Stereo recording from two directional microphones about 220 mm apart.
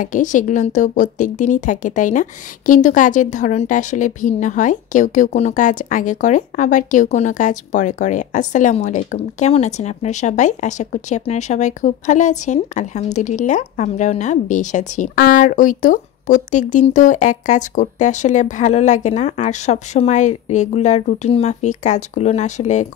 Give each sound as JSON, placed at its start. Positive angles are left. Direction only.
{"t": 0.0, "sound": "a woman's voice", "side_deg": 35}